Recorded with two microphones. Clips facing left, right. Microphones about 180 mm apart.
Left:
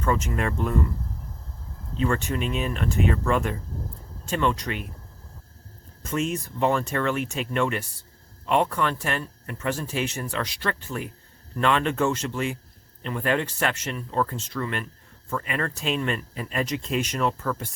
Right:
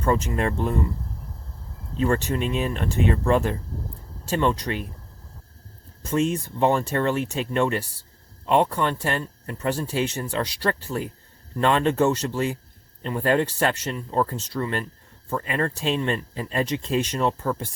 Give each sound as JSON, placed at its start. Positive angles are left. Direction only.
{"t": 0.0, "sound": "speech", "side_deg": -35}
{"t": 2.0, "sound": "speech", "side_deg": -35}
{"t": 6.0, "sound": "speech", "side_deg": -30}